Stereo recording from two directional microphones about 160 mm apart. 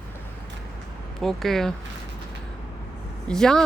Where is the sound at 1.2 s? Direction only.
Centre (ahead or behind).